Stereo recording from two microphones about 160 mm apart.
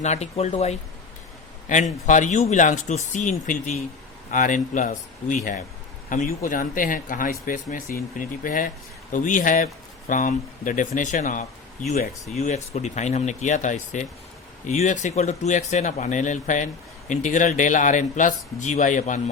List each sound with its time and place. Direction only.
0.0 s speech: 45° left (ahead or behind)